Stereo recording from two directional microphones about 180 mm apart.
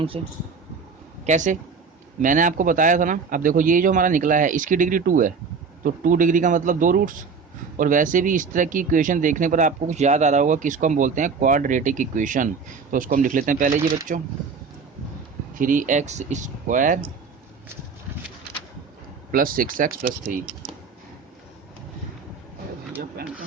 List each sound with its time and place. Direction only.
0.1 s speech: 30° right (ahead or behind)
15.5 s speech: 50° right (ahead or behind)
19.3 s speech: 50° right (ahead or behind)